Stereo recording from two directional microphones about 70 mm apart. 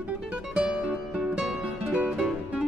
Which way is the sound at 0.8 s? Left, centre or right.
Centre.